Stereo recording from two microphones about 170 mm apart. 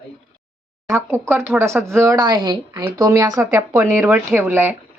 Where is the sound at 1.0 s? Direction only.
15° right (ahead or behind).